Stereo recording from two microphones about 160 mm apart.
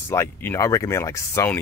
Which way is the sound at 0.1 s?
15° left (ahead or behind).